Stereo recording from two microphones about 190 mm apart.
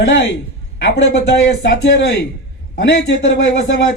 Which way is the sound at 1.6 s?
70° left (ahead or behind).